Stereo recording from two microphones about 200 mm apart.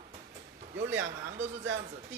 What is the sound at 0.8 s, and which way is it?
Speech, 70° right (ahead or behind).